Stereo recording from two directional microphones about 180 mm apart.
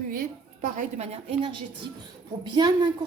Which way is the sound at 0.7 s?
45° right (ahead or behind).